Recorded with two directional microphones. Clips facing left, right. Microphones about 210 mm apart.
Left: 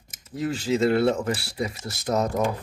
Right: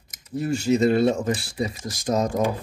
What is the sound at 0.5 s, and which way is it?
Speech, 15° right (ahead or behind).